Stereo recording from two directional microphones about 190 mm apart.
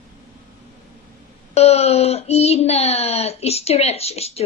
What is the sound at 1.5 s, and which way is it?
Speech, 35° left (ahead or behind).